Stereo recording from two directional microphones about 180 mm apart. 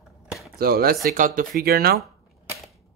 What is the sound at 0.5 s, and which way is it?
Speech, 55° right (ahead or behind).